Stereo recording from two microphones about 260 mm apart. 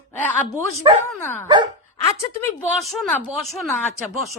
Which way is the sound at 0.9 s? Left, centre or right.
Centre.